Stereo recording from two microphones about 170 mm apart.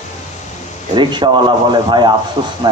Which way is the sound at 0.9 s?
25° right (ahead or behind).